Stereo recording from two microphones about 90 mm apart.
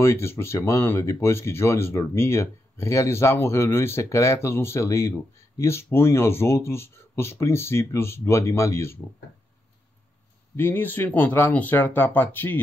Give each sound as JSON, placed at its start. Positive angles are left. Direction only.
{"t": 0.0, "sound": "speech", "side_deg": 30}
{"t": 10.5, "sound": "speech", "side_deg": 25}